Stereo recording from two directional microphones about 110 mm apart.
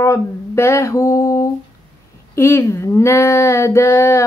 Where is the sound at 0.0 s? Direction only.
25° left (ahead or behind).